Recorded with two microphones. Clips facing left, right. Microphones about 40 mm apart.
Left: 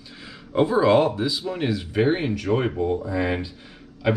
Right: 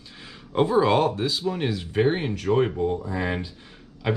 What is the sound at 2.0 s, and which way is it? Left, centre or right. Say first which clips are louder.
Speech: left 1 dB; left.